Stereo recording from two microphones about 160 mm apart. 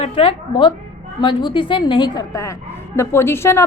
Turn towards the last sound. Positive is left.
turn(degrees=15)  # may be behind; listen again after turning